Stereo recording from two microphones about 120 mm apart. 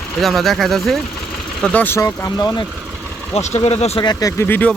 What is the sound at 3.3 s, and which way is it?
Speech, 70° left (ahead or behind).